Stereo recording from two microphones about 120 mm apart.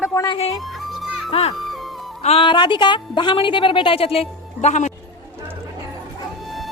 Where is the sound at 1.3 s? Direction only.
55° left (ahead or behind).